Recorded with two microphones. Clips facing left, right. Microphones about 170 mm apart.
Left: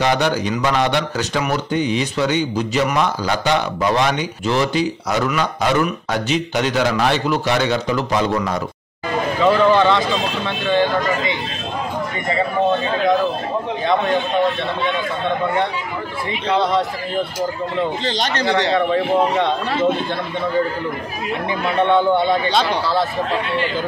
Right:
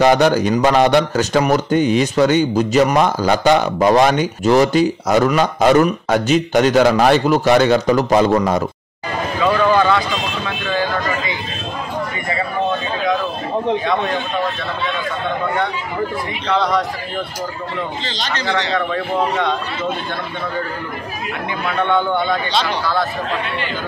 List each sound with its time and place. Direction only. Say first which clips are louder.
0.0 s a man's voice: right 5 dB; 50° right (ahead or behind)
9.4 s speech: left 1 dB; 25° left (ahead or behind)
18.0 s speech: left 4 dB; 55° left (ahead or behind)
18.5 s speech: left 3 dB; 20° left (ahead or behind)
21.6 s speech: left 3 dB; 30° left (ahead or behind)